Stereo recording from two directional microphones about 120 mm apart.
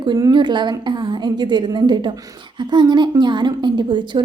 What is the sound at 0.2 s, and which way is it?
A woman's voice, 35° right (ahead or behind).